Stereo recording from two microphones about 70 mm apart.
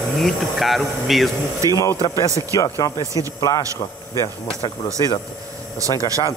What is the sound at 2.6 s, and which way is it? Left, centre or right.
Speech, left.